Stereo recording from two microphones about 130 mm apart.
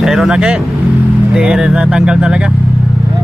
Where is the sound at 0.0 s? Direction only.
5° right (ahead or behind).